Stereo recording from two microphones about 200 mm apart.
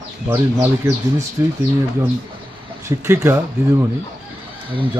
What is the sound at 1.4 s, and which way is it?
Speech, 15° right (ahead or behind).